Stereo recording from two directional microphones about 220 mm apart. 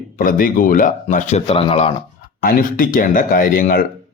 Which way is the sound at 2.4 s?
40° left (ahead or behind).